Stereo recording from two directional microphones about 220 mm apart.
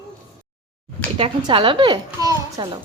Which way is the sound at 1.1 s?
25° right (ahead or behind).